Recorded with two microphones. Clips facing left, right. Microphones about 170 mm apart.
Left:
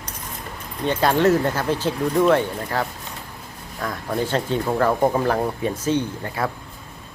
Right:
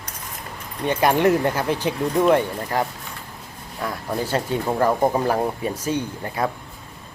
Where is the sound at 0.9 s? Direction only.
15° right (ahead or behind).